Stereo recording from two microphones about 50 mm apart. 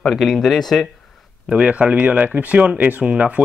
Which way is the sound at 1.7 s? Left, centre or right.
Right.